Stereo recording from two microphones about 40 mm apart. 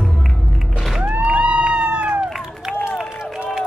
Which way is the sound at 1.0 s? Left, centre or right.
Right.